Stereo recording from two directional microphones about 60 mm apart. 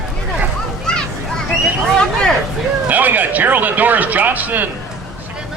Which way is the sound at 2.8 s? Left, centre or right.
Right.